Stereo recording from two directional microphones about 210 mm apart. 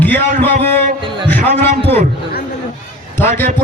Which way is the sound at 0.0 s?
10° left (ahead or behind).